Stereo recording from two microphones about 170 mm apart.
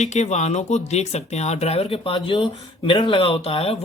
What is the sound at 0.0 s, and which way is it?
Speech, 45° left (ahead or behind).